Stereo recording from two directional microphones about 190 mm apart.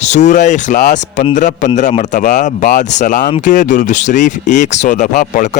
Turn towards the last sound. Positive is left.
turn(degrees=40)  # may be behind; listen again after turning